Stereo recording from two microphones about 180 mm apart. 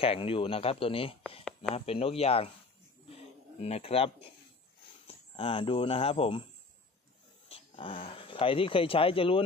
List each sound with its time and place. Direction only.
0.0 s speech: 30° left (ahead or behind)
3.1 s a sound: 35° left (ahead or behind)
5.0 s speech: 30° left (ahead or behind)
7.4 s speech: 30° left (ahead or behind)